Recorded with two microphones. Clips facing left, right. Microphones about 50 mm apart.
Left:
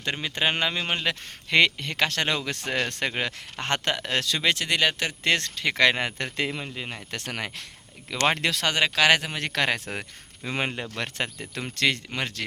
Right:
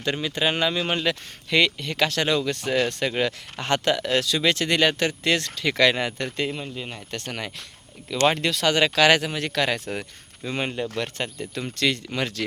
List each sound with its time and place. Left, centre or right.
0.0 s speech: left
1.5 s speech: left
1.9 s speech: left
3.1 s speech: left
3.6 s speech: left
4.4 s speech: left
4.7 s speech: centre
5.2 s speech: left
6.3 s speech: left
8.1 s speech: left
8.6 s speech: centre
9.5 s speech: left
10.9 s speech: left
12.1 s speech: centre